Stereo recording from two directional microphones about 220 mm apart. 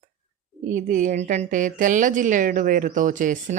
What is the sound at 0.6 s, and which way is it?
A woman's voice, 35° right (ahead or behind).